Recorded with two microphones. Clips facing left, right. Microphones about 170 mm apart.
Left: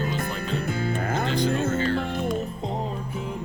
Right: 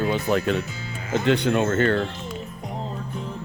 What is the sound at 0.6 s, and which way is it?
Speech, 55° left (ahead or behind).